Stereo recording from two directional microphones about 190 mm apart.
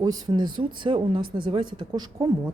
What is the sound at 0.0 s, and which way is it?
Speech, 20° right (ahead or behind).